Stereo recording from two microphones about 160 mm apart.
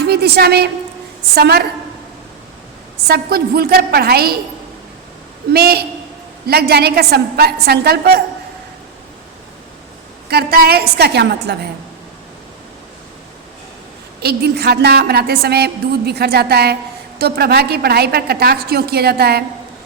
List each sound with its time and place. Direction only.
0.0 s a woman's voice: 90° right
3.1 s a woman's voice: 75° right (ahead or behind)
5.5 s a woman's voice: 80° right
10.2 s a woman's voice: 75° right (ahead or behind); by 11.7 s 90° right
14.2 s a woman's voice: 90° right